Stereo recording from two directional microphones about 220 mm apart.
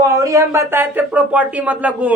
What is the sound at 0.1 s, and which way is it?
Speech, 15° right (ahead or behind).